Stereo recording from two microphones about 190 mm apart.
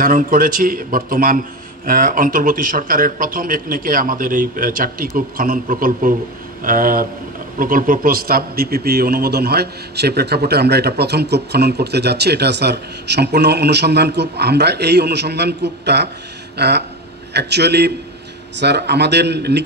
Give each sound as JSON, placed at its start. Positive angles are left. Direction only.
{"t": 0.0, "sound": "a man's voice", "side_deg": -45}